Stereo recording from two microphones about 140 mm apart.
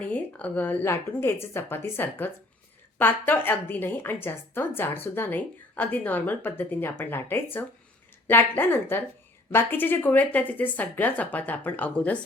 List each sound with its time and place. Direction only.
0.0 s a woman's voice: 10° left (ahead or behind)